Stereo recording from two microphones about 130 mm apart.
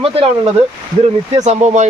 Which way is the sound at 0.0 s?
45° right (ahead or behind).